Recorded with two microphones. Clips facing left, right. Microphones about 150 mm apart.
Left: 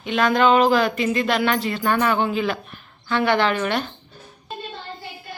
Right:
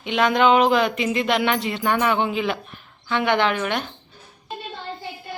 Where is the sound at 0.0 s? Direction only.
20° right (ahead or behind).